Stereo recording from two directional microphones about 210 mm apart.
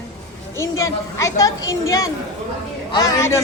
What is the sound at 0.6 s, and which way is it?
A woman's voice, 15° left (ahead or behind).